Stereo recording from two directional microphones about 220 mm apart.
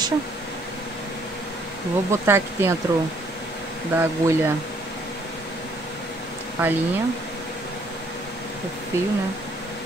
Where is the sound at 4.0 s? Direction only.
10° right (ahead or behind).